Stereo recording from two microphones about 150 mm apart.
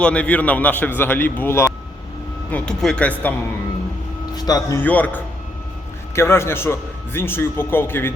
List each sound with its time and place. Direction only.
0.0 s a man's voice: 10° left (ahead or behind)
2.5 s a man's voice: 5° left (ahead or behind)
4.4 s speech: 25° left (ahead or behind)
4.8 s a man's voice: 10° left (ahead or behind)